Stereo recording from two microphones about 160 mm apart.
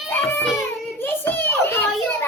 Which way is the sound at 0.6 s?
10° left (ahead or behind).